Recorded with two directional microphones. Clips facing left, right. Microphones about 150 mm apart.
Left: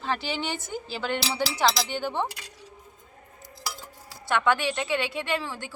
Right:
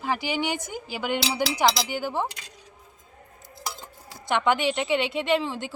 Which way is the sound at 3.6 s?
20° right (ahead or behind).